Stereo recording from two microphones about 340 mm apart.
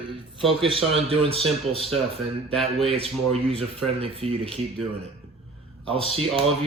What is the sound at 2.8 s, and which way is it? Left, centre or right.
Speech, centre.